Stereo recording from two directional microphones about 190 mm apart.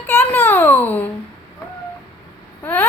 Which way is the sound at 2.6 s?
10° left (ahead or behind).